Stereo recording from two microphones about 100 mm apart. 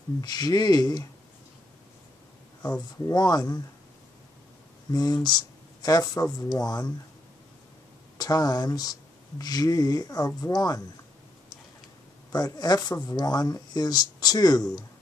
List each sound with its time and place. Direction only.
0.2 s speech: 40° left (ahead or behind)
2.6 s speech: 40° left (ahead or behind)
4.9 s speech: 40° left (ahead or behind)
8.2 s speech: 40° left (ahead or behind)
12.3 s speech: 40° left (ahead or behind)